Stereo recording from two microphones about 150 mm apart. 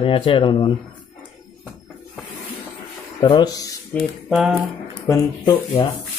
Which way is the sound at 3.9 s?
10° left (ahead or behind).